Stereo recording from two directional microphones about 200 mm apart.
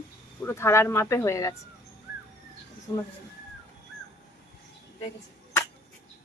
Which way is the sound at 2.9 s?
20° left (ahead or behind).